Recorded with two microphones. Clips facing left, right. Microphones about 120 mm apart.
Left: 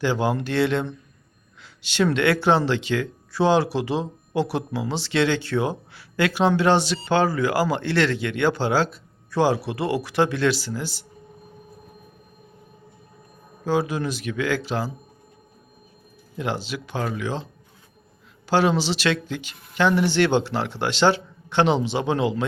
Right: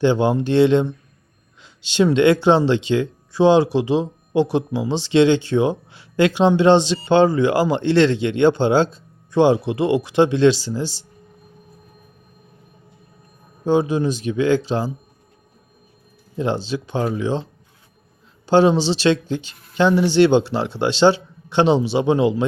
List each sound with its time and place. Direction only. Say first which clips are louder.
0.0 s speech: right 6 dB; 25° right (ahead or behind)
13.7 s speech: right 5 dB; 20° right (ahead or behind)
16.7 s speech: right 6 dB; 25° right (ahead or behind)
18.4 s speech: right 6 dB; 25° right (ahead or behind)